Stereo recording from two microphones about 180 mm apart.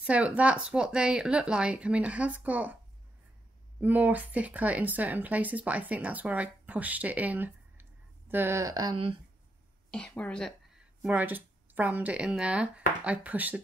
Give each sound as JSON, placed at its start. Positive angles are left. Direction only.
{"t": 0.0, "sound": "speech", "side_deg": -5}
{"t": 3.8, "sound": "speech", "side_deg": -10}
{"t": 9.8, "sound": "a woman's voice", "side_deg": 5}
{"t": 11.0, "sound": "speech", "side_deg": -10}